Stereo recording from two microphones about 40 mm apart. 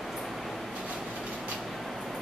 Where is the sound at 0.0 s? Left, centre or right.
Centre.